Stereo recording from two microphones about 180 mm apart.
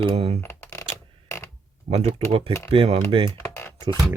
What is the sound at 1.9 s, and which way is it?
Speech, 35° right (ahead or behind).